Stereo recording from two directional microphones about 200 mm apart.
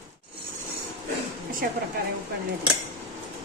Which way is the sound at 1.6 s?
45° right (ahead or behind).